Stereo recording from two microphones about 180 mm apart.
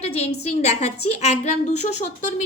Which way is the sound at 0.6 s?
40° left (ahead or behind).